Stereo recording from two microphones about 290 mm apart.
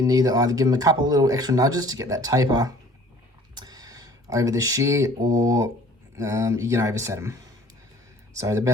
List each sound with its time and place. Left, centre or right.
0.0 s speech: centre
8.4 s speech: centre